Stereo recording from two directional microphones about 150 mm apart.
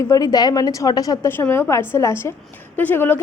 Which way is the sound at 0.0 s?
20° left (ahead or behind).